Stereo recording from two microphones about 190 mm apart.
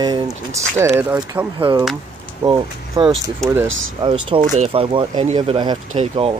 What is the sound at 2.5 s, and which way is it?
Speech, 20° right (ahead or behind).